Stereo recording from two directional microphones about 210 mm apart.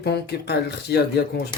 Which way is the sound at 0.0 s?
50° left (ahead or behind).